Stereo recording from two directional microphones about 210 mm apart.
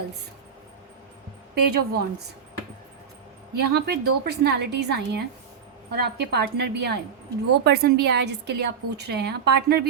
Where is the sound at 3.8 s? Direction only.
50° right (ahead or behind).